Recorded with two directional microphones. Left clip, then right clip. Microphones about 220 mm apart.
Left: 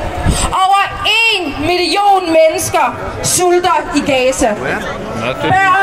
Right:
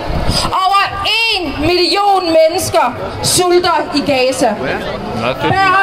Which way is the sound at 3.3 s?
30° right (ahead or behind).